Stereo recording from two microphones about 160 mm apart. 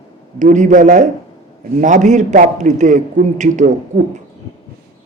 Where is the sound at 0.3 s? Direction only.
50° right (ahead or behind).